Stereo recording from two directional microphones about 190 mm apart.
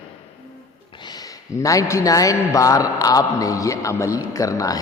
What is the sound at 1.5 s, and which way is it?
A man's voice, 15° left (ahead or behind).